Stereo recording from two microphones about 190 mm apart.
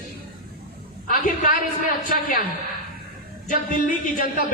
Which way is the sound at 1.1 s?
45° left (ahead or behind).